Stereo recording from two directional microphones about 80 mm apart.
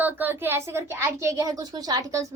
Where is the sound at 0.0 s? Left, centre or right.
Right.